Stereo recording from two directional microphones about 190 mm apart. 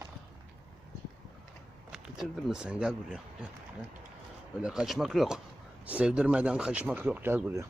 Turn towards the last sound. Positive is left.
turn(degrees=-10)  # may be behind; listen again after turning